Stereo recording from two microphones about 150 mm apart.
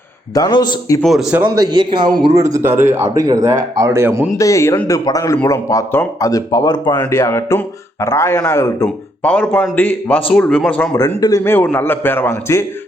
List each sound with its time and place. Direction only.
0.3 s speech: 25° left (ahead or behind)
1.0 s speech: centre (ahead or behind)
1.5 s a man's voice: 30° right (ahead or behind); by 3.2 s 15° right (ahead or behind)
3.2 s speech: 25° right (ahead or behind)
4.4 s speech: 20° left (ahead or behind)
6.9 s a man's voice: 15° left (ahead or behind)
11.2 s a man's voice: 20° left (ahead or behind)